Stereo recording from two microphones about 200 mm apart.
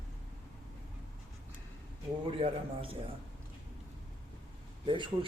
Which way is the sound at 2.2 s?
25° right (ahead or behind).